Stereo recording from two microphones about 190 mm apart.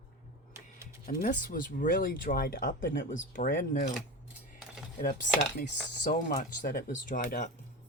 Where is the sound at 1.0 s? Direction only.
45° left (ahead or behind).